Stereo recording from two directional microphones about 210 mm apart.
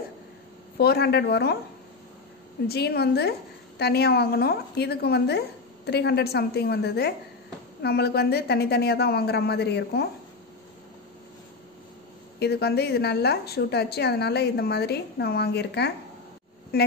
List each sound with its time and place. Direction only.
0.7 s a woman's voice: 50° left (ahead or behind)
2.7 s a woman's voice: 50° left (ahead or behind)
12.4 s a woman's voice: 50° left (ahead or behind)